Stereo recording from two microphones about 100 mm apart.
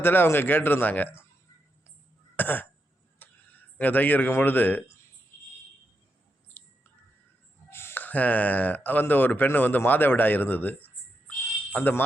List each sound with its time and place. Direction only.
0.0 s speech: 20° left (ahead or behind)
2.3 s cough: 20° left (ahead or behind)
3.2 s speech: 15° left (ahead or behind)
7.7 s speech: 25° left (ahead or behind)